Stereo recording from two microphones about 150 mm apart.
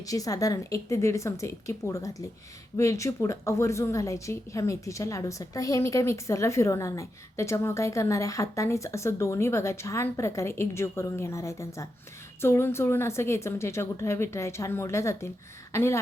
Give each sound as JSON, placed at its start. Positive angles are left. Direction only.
{"t": 0.0, "sound": "a woman's voice", "side_deg": 25}